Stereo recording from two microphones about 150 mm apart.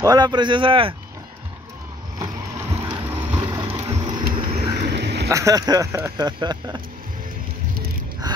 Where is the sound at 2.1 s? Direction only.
20° right (ahead or behind).